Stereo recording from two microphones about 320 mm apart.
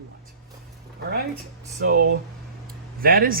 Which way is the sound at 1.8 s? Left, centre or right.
Right.